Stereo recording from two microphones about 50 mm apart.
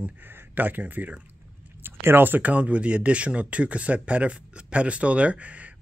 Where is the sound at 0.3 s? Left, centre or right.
Right.